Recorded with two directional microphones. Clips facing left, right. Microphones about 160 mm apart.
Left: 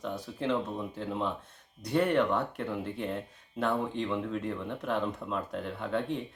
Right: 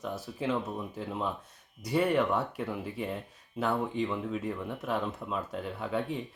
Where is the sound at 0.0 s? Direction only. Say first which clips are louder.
Even; 5° right (ahead or behind).